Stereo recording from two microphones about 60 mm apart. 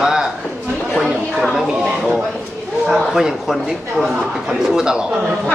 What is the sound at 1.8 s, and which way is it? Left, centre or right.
Speech, centre.